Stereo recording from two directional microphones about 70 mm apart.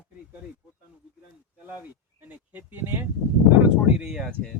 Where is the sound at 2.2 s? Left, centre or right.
Right.